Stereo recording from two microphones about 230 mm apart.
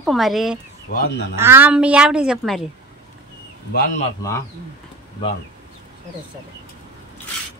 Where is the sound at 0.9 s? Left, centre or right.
Left.